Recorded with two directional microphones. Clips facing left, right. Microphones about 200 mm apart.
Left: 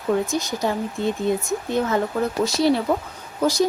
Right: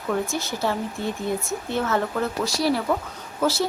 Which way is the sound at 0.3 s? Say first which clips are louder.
Left 2 dB; 15° left (ahead or behind).